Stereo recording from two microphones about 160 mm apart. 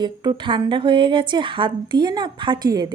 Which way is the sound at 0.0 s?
25° right (ahead or behind).